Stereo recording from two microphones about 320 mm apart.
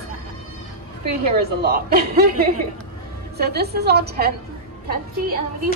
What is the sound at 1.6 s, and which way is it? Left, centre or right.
Speech, right.